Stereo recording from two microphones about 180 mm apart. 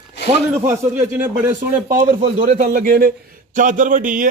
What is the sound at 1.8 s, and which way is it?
A man's voice, 45° right (ahead or behind).